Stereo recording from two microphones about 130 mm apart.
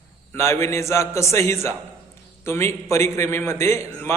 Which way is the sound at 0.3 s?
20° left (ahead or behind).